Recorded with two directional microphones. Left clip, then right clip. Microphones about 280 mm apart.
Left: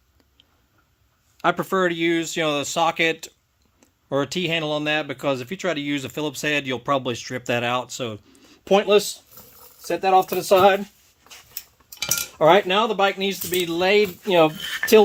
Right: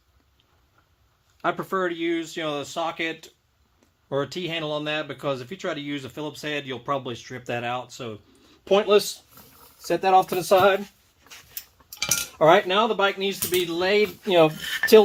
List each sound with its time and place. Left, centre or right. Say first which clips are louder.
1.4 s speech: left 5 dB; left
9.3 s speech: left 2 dB; left
12.4 s speech: left 1 dB; left
14.3 s speech: even; left
14.6 s a sound: even; centre